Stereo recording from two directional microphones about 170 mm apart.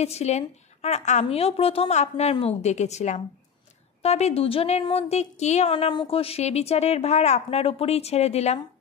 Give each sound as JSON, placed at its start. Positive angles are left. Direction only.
{"t": 0.0, "sound": "a woman's voice", "side_deg": 40}